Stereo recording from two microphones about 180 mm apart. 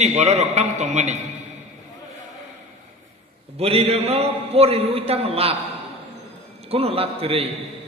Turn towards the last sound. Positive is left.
turn(degrees=-35)  # may be behind; listen again after turning